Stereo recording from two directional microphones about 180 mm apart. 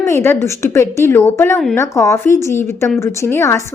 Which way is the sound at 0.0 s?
15° left (ahead or behind).